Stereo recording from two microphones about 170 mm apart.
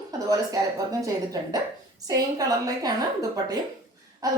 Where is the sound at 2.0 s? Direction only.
20° right (ahead or behind).